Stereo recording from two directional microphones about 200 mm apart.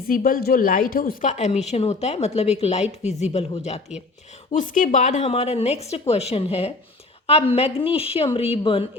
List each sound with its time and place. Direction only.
0.1 s a woman's voice: 45° left (ahead or behind); by 8.9 s 25° left (ahead or behind)